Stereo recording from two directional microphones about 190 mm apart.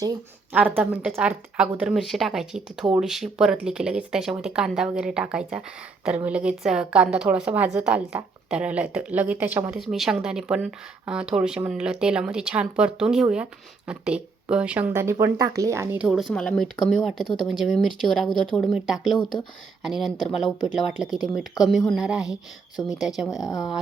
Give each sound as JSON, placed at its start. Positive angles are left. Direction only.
{"t": 0.5, "sound": "a woman's voice", "side_deg": -10}
{"t": 16.0, "sound": "a woman's voice", "side_deg": 0}
{"t": 23.3, "sound": "speech", "side_deg": 20}